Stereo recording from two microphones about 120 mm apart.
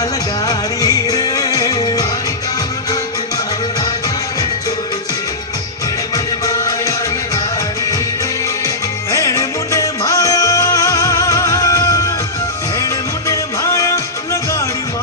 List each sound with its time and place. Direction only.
0.4 s music: 30° left (ahead or behind)
6.1 s music: 30° left (ahead or behind)
9.1 s music: 25° left (ahead or behind)